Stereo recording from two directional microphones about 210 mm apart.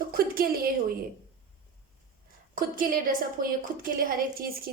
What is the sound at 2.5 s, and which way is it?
A woman's voice, 40° right (ahead or behind).